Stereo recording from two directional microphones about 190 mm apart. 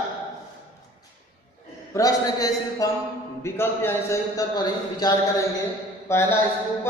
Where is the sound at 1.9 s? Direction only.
20° left (ahead or behind).